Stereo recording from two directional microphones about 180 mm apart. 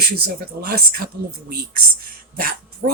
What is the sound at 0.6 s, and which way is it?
Speech, 60° right (ahead or behind).